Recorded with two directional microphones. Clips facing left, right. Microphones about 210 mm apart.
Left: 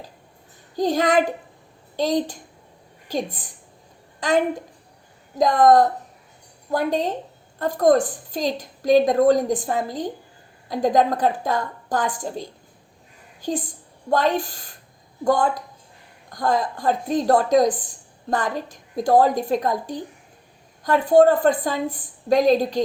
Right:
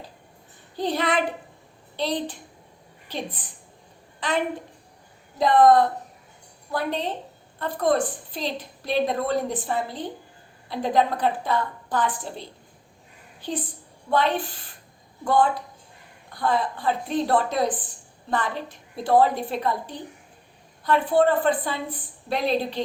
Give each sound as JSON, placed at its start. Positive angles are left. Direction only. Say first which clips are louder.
{"t": 0.8, "sound": "a woman's voice", "louder": "left 5 dB", "side_deg": 45}